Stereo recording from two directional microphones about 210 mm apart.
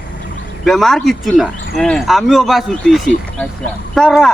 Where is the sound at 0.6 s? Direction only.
Centre (ahead or behind).